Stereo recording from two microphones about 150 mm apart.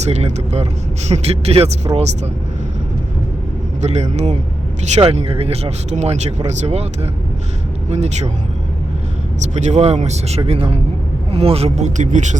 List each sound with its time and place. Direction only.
0.0 s speech: 45° right (ahead or behind)
3.8 s speech: 50° right (ahead or behind)
9.6 s speech: 50° right (ahead or behind)